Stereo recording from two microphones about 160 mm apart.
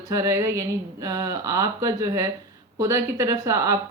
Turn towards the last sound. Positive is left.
turn(degrees=-20)  # may be behind; listen again after turning